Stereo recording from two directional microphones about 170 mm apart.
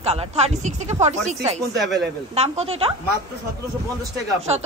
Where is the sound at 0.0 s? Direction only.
40° right (ahead or behind).